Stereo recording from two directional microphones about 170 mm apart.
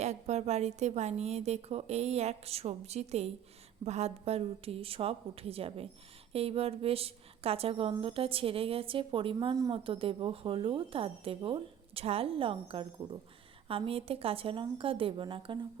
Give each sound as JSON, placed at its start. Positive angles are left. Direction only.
{"t": 0.0, "sound": "speech", "side_deg": -40}